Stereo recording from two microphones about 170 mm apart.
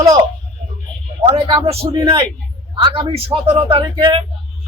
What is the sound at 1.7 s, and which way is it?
Speech, 35° right (ahead or behind).